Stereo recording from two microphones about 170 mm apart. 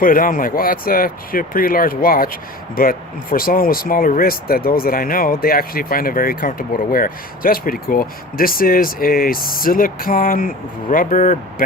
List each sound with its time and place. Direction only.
0.0 s speech: 55° left (ahead or behind)